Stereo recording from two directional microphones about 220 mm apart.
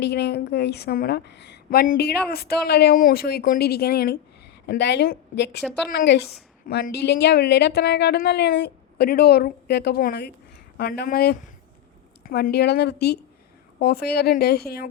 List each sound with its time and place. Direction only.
0.0 s a woman's voice: 50° left (ahead or behind)